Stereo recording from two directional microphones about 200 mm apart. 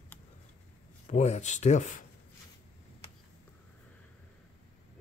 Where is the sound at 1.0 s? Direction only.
35° left (ahead or behind).